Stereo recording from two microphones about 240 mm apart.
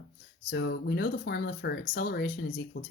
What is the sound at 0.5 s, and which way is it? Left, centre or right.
Speech, left.